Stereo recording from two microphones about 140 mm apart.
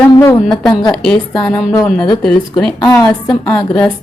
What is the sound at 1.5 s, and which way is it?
Speech, 20° left (ahead or behind).